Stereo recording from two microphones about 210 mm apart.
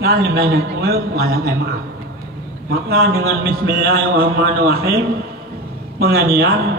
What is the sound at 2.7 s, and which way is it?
A man's voice, 45° right (ahead or behind).